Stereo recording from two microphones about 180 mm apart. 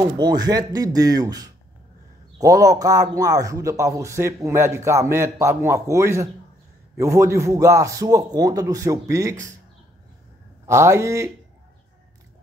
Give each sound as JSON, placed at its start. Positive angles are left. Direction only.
{"t": 0.2, "sound": "a man's voice", "side_deg": -20}
{"t": 10.7, "sound": "a man's voice", "side_deg": -15}